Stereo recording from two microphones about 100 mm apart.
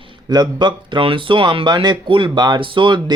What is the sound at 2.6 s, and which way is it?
Speech, 55° right (ahead or behind).